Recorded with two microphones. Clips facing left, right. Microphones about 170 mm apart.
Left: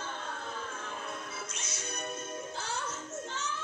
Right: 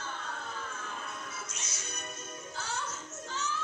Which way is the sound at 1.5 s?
55° left (ahead or behind).